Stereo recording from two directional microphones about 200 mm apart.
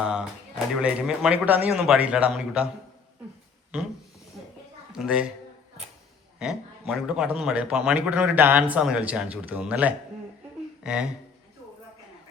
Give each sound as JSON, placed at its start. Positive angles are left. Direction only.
{"t": 0.0, "sound": "a man's voice", "side_deg": -5}
{"t": 4.9, "sound": "speech", "side_deg": -5}
{"t": 6.4, "sound": "a man's voice", "side_deg": 0}